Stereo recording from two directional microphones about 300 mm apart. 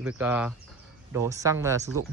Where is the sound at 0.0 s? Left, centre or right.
Centre.